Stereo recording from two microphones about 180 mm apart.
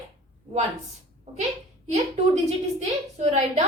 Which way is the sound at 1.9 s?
40° right (ahead or behind).